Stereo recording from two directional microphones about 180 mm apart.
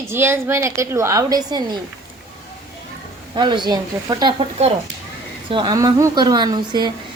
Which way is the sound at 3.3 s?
25° right (ahead or behind).